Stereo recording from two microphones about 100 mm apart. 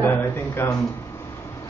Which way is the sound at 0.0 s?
20° left (ahead or behind).